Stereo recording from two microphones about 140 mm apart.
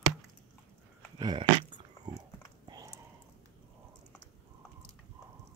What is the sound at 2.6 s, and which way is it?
Typing, 30° right (ahead or behind).